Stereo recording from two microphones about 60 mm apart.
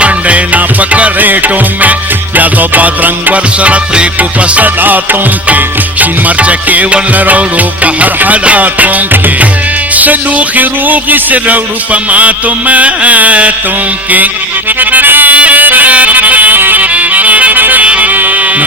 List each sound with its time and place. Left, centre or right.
0.0 s music: right
14.8 s music: right